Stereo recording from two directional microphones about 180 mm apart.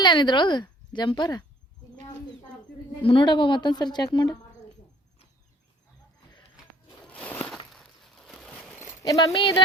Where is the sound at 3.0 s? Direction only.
25° left (ahead or behind).